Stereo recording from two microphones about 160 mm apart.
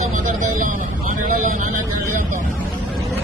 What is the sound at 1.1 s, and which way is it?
Speech, 55° right (ahead or behind).